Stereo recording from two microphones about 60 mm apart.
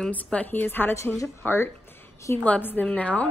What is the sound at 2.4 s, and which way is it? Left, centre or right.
Speech, left.